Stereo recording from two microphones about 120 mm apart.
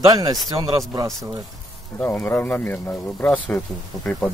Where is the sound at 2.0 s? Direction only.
15° left (ahead or behind).